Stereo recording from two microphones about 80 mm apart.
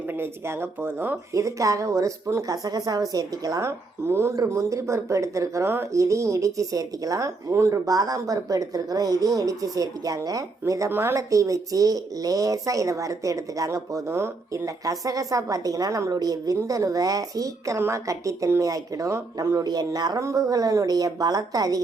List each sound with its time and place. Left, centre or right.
0.1 s speech: right
1.3 s speech: right
2.6 s speech: right
3.6 s speech: right
10.9 s a woman's voice: right
11.2 s speech: right
17.7 s speech: right
19.5 s speech: right